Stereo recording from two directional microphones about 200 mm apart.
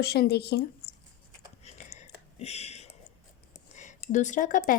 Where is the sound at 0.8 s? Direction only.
50° left (ahead or behind).